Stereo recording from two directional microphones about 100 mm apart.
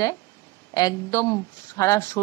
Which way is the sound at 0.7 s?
40° left (ahead or behind).